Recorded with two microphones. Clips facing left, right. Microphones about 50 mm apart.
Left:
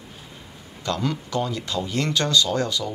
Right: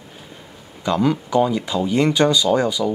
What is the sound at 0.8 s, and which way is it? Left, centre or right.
Speech, centre.